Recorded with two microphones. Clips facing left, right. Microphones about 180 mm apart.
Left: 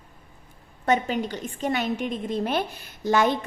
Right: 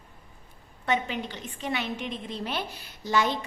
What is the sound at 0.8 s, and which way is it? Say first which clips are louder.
A woman's voice: left 5 dB; 45° left (ahead or behind).